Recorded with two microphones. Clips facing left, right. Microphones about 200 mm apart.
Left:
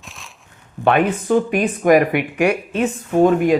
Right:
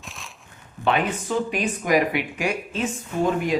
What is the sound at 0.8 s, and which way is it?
Speech, 55° left (ahead or behind).